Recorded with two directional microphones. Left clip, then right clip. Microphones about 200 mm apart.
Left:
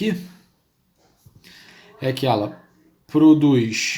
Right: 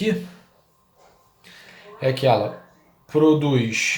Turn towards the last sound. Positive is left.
turn(degrees=45)  # may be behind; listen again after turning